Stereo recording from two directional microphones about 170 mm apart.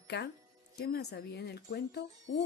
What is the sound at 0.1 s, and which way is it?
Speech, 90° left.